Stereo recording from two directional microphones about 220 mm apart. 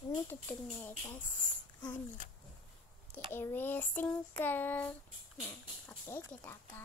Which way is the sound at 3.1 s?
10° left (ahead or behind).